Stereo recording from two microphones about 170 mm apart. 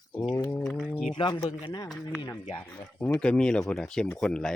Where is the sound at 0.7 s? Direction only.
5° left (ahead or behind).